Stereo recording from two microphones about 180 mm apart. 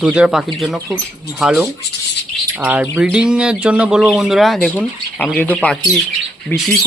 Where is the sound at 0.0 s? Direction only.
5° right (ahead or behind).